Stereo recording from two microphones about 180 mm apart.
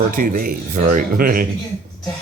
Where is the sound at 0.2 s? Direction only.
50° right (ahead or behind).